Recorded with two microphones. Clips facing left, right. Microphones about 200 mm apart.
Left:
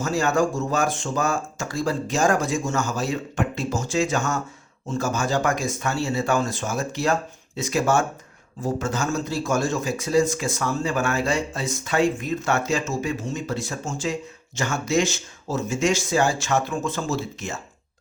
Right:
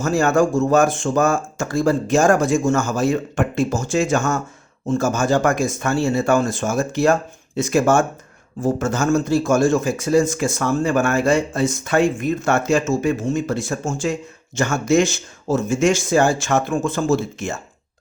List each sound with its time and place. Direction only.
0.0 s a man's voice: 50° right (ahead or behind)